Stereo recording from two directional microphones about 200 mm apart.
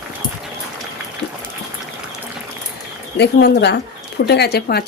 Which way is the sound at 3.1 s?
55° left (ahead or behind).